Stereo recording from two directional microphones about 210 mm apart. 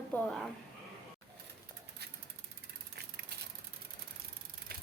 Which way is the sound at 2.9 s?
50° right (ahead or behind).